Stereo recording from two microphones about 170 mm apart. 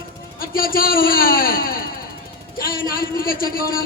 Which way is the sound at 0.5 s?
60° left (ahead or behind).